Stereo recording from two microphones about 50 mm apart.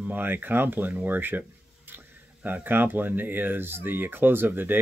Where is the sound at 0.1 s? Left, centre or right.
Right.